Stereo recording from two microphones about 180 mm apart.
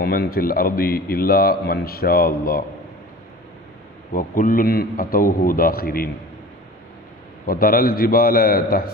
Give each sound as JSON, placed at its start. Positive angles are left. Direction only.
{"t": 0.0, "sound": "a man's voice", "side_deg": 55}
{"t": 4.1, "sound": "a man's voice", "side_deg": 50}
{"t": 7.4, "sound": "a man's voice", "side_deg": 55}